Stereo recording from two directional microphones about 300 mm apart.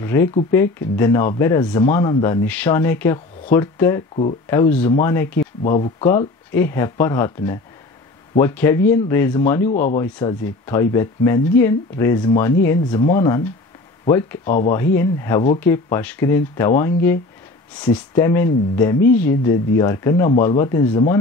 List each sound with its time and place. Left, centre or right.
0.0 s speech: centre
4.1 s speech: centre
4.5 s speech: centre
5.6 s speech: left
14.4 s speech: left
15.0 s speech: centre